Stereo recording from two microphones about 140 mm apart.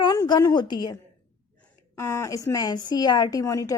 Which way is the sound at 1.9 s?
20° left (ahead or behind).